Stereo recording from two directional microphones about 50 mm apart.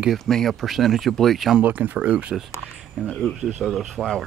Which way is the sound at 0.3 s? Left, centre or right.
Centre.